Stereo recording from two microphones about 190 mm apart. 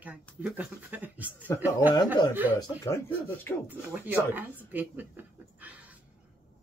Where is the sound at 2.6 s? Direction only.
15° left (ahead or behind).